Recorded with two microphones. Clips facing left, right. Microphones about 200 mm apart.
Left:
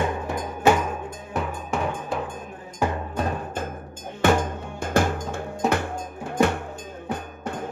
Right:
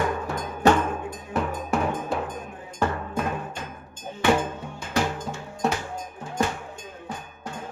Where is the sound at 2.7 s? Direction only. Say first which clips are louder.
Left 1 dB; 15° left (ahead or behind).